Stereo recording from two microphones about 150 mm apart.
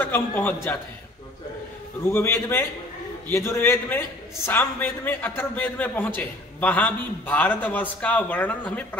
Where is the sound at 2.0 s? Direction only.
15° left (ahead or behind).